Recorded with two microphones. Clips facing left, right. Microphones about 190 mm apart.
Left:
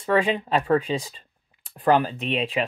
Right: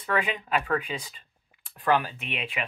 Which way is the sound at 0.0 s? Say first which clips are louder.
Left 7 dB; 30° left (ahead or behind).